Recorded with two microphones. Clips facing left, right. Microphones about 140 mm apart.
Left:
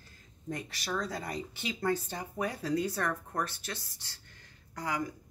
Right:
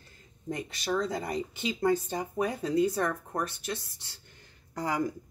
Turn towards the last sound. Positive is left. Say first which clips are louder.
# right 4 dB
turn(degrees=-30)  # may be behind; listen again after turning